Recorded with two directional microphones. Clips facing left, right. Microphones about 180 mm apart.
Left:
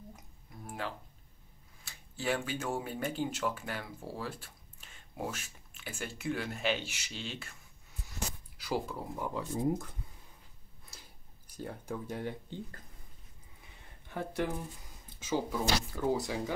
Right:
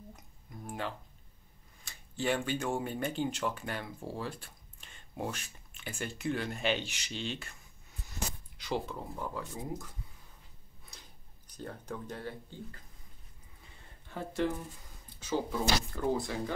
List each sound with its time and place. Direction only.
0.7 s speech: 5° left (ahead or behind)
8.5 s speech: 5° left (ahead or behind)
10.9 s a sound: 5° left (ahead or behind)
14.0 s speech: 15° left (ahead or behind)